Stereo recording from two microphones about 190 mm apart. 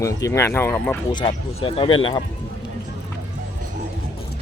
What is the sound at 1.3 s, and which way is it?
Speech, 30° left (ahead or behind).